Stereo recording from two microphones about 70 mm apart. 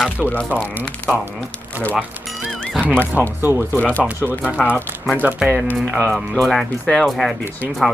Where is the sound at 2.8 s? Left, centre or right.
Left.